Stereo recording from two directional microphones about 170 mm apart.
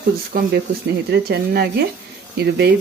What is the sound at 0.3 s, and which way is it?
Speech, 60° right (ahead or behind).